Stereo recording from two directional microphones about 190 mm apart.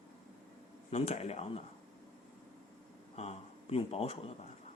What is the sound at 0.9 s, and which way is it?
Speech, 35° left (ahead or behind).